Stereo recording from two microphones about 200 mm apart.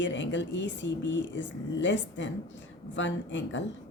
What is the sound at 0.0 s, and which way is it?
Speech, 65° left (ahead or behind).